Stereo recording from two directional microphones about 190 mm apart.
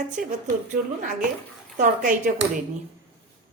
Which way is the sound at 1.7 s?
40° right (ahead or behind).